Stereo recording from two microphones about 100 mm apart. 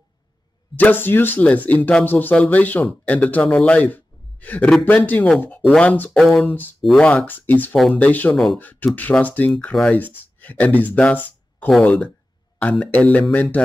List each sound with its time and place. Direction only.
0.7 s a man's voice: 20° left (ahead or behind)
9.5 s speech: 5° left (ahead or behind)